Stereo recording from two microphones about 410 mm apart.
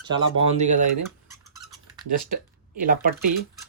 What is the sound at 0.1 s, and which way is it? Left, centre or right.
Speech, centre.